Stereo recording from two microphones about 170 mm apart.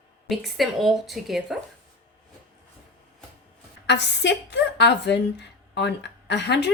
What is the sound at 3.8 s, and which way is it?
A woman's voice, 90° left.